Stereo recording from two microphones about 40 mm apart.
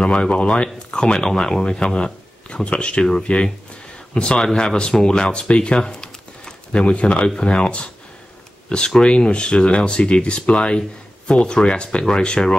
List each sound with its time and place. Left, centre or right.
0.0 s speech: left
2.5 s speech: left
6.7 s speech: left